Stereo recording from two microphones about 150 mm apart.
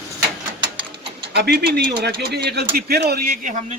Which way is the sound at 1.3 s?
90° right.